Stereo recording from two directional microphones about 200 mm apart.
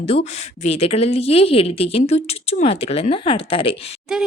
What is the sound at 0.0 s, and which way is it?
A woman's voice, 30° left (ahead or behind).